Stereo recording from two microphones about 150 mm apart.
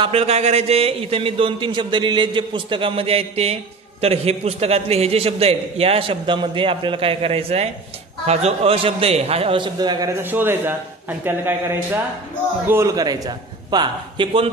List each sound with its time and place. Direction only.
0.0 s a man's voice: 40° right (ahead or behind)
10.2 s a man's voice: 15° right (ahead or behind); by 14.5 s 35° right (ahead or behind)